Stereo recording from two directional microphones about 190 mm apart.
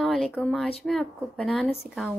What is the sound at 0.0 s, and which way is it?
Speech, centre (ahead or behind).